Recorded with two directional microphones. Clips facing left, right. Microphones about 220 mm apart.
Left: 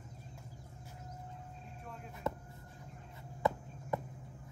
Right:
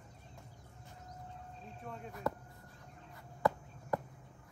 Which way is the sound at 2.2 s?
Centre (ahead or behind).